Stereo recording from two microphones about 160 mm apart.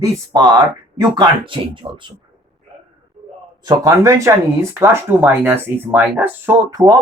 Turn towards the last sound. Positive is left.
turn(degrees=-20)  # may be behind; listen again after turning